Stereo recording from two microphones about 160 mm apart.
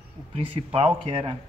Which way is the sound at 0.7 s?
35° right (ahead or behind).